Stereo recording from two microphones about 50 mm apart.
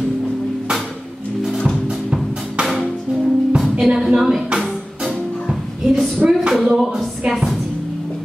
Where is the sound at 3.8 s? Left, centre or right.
Centre.